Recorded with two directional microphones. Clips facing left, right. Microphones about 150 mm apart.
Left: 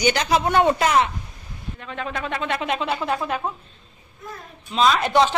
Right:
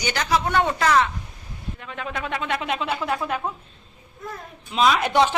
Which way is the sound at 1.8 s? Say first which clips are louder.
Left 2 dB; 10° right (ahead or behind).